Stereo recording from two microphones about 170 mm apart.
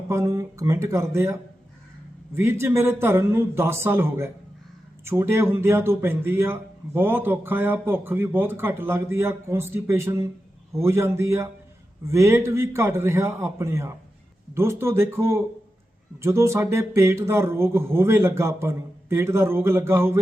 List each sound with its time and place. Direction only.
0.1 s speech: 15° right (ahead or behind)